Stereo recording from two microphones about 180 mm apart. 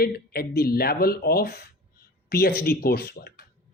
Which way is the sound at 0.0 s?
60° left (ahead or behind).